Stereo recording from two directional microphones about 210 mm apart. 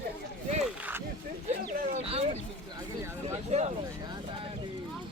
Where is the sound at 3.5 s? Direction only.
30° right (ahead or behind).